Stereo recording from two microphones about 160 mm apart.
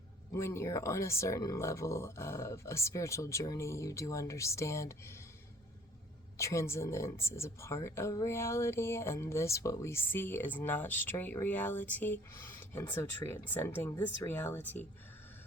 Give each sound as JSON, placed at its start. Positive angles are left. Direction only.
{"t": 0.3, "sound": "speech", "side_deg": 15}
{"t": 6.3, "sound": "speech", "side_deg": 20}